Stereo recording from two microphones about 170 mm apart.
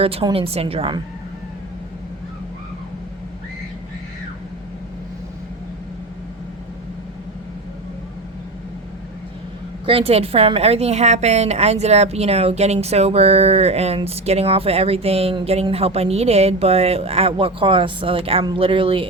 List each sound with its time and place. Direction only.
0.0 s a woman's voice: 35° right (ahead or behind)
9.8 s a woman's voice: 35° right (ahead or behind)